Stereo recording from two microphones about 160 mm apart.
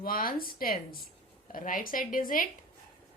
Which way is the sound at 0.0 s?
65° left (ahead or behind).